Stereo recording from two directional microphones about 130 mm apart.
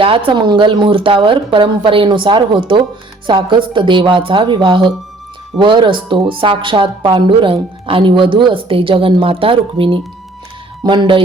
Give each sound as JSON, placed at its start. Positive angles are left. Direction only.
{"t": 0.3, "sound": "speech", "side_deg": -35}